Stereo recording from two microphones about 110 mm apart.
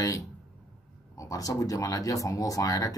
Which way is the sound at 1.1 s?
30° left (ahead or behind).